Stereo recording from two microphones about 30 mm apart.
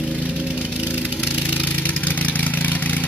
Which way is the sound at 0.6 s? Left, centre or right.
Right.